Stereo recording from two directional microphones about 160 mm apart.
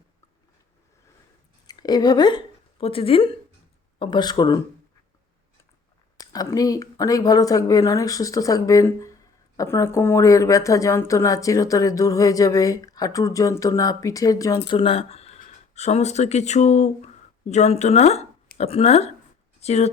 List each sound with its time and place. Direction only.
1.6 s a woman's voice: 25° left (ahead or behind)
6.1 s a woman's voice: 20° left (ahead or behind)
14.7 s speech: 30° left (ahead or behind)